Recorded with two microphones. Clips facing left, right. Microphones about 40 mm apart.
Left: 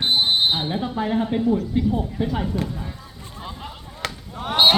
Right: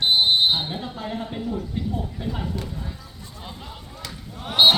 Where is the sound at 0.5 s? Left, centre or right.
Centre.